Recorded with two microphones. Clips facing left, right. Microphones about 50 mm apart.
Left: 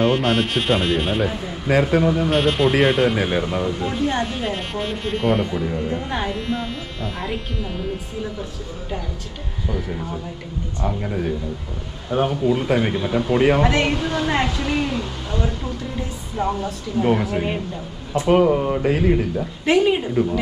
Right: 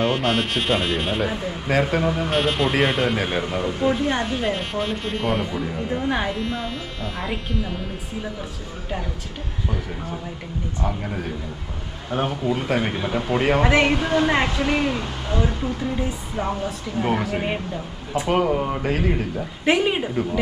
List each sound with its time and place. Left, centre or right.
0.0 s a woman's voice: centre
12.1 s a woman's voice: centre
12.9 s speech: centre
17.0 s speech: centre
18.3 s a woman's voice: centre
19.6 s speech: centre
20.2 s a woman's voice: centre